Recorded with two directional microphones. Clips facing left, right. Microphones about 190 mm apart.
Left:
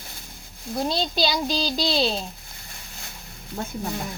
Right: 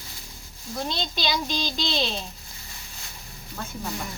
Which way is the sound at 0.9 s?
35° left (ahead or behind).